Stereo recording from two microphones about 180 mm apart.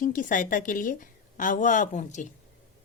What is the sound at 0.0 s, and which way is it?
Speech, 50° left (ahead or behind).